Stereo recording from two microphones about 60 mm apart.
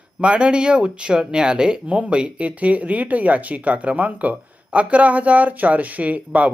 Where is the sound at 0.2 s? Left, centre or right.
Centre.